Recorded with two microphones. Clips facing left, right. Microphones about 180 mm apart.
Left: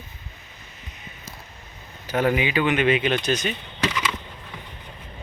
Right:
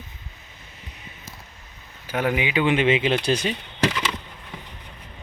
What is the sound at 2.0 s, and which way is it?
Speech, 10° right (ahead or behind).